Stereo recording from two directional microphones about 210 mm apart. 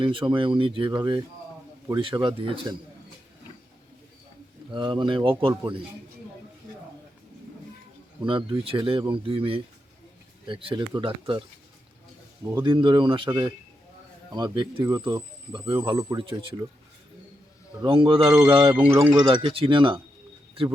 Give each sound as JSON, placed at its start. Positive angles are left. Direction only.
{"t": 0.0, "sound": "speech", "side_deg": -25}
{"t": 4.7, "sound": "speech", "side_deg": -20}
{"t": 8.2, "sound": "speech", "side_deg": -25}
{"t": 12.6, "sound": "speech", "side_deg": -25}
{"t": 17.8, "sound": "speech", "side_deg": -25}